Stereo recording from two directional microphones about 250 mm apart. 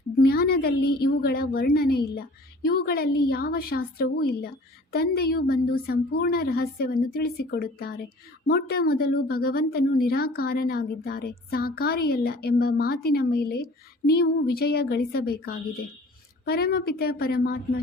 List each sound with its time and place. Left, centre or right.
0.2 s a woman's voice: left